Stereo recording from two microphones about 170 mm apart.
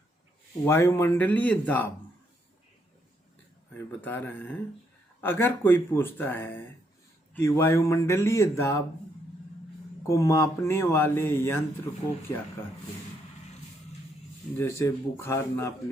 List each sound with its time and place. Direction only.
0.6 s speech: 15° left (ahead or behind)
4.0 s speech: 10° left (ahead or behind)
10.0 s speech: 20° left (ahead or behind)
14.6 s speech: 15° left (ahead or behind)